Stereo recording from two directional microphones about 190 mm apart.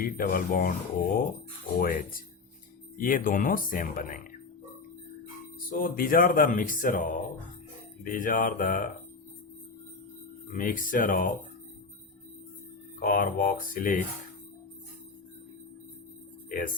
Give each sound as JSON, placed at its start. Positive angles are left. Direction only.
{"t": 0.0, "sound": "speech", "side_deg": 50}
{"t": 5.6, "sound": "speech", "side_deg": 50}
{"t": 10.6, "sound": "speech", "side_deg": 45}
{"t": 13.0, "sound": "speech", "side_deg": 45}
{"t": 16.5, "sound": "speech", "side_deg": 45}